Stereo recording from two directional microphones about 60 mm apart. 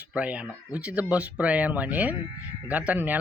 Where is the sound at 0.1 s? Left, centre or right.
Centre.